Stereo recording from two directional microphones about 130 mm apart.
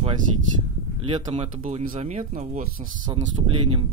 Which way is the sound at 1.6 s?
75° right (ahead or behind).